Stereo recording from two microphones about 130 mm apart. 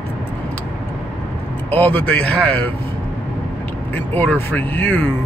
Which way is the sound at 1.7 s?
10° left (ahead or behind).